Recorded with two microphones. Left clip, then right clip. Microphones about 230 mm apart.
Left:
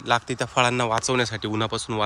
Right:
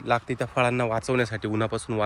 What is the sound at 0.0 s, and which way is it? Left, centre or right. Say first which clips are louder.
A man's voice: left 2 dB; centre.